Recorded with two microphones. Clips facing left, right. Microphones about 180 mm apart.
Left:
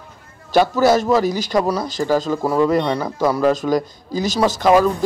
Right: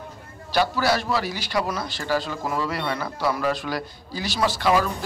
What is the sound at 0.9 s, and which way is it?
A man's voice, 45° left (ahead or behind).